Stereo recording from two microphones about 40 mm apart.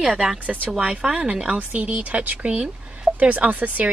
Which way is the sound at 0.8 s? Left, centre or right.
Right.